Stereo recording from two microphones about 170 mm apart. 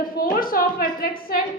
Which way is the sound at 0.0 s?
55° left (ahead or behind).